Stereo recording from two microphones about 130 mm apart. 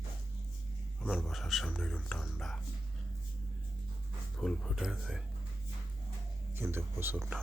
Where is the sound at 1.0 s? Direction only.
5° right (ahead or behind).